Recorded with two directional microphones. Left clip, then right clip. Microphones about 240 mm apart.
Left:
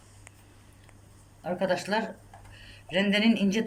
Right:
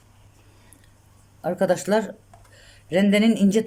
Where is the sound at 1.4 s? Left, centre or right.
Right.